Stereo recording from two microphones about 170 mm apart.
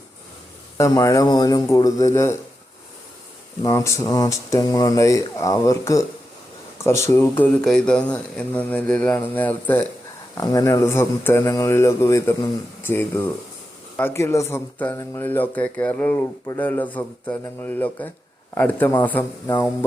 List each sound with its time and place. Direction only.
0.8 s speech: 20° left (ahead or behind)
3.6 s speech: 20° left (ahead or behind)
10.3 s speech: 20° left (ahead or behind)